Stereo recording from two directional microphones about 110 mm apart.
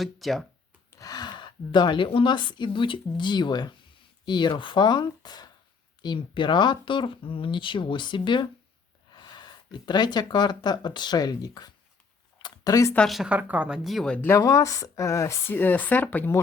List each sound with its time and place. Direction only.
0.0 s speech: centre (ahead or behind)
0.9 s a woman's voice: 30° left (ahead or behind)
12.4 s a sound: 40° left (ahead or behind)
13.1 s speech: centre (ahead or behind)
13.3 s speech: 10° right (ahead or behind)
14.2 s speech: 25° left (ahead or behind)